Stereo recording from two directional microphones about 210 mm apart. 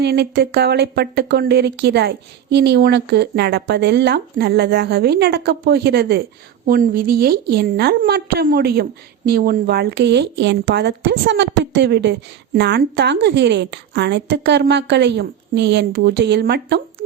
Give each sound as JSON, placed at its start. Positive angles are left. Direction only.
{"t": 0.0, "sound": "a woman's voice", "side_deg": -50}